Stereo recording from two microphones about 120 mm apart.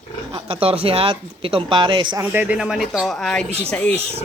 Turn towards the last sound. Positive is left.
turn(degrees=10)  # may be behind; listen again after turning